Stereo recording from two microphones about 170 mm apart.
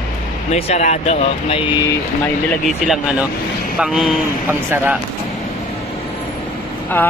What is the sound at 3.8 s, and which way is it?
Speech, centre (ahead or behind).